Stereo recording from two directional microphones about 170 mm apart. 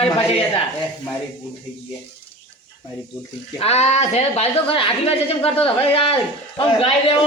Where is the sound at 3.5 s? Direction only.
40° left (ahead or behind).